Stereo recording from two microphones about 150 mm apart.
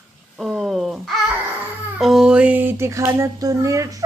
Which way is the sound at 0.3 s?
Centre (ahead or behind).